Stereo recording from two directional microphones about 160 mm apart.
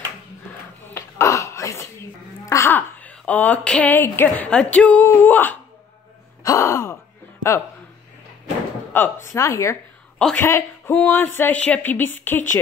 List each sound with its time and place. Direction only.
0.8 s a sound: 15° left (ahead or behind)
2.4 s speech: 20° left (ahead or behind)
6.4 s gasp: 20° left (ahead or behind)
8.9 s speech: 15° left (ahead or behind)